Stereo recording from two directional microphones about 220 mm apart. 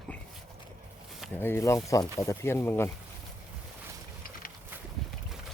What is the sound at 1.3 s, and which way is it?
Speech, 10° left (ahead or behind).